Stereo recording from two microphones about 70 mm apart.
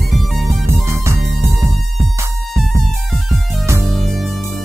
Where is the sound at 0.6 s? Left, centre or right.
Right.